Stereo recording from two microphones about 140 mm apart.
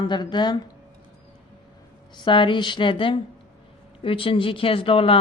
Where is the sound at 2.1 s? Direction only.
35° left (ahead or behind).